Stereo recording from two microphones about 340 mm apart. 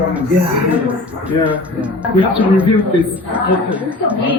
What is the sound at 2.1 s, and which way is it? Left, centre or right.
A woman's voice, centre.